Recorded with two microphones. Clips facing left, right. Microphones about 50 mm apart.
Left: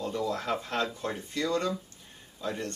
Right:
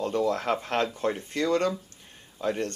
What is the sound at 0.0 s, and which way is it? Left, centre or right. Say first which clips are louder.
Speech: right 5 dB; right.